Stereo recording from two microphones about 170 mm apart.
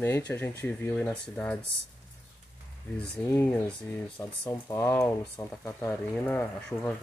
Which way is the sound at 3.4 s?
5° left (ahead or behind).